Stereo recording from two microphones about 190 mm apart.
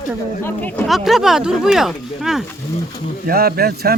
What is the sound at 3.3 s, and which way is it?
Speech, 55° right (ahead or behind).